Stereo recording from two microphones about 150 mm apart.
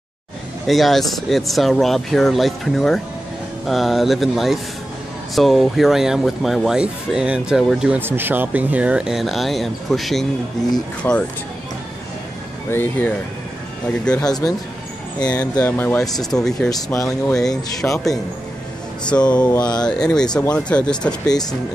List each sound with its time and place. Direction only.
0.7 s speech: centre (ahead or behind)
11.0 s speech: 15° left (ahead or behind)
12.7 s speech: 15° left (ahead or behind)
14.2 s speech: 25° left (ahead or behind)
15.2 s speech: 10° left (ahead or behind)
16.7 s speech: 20° left (ahead or behind)
19.2 s speech: 10° left (ahead or behind)
19.5 s speech: 25° left (ahead or behind)
19.8 s speech: 5° left (ahead or behind)
21.3 s speech: 25° left (ahead or behind)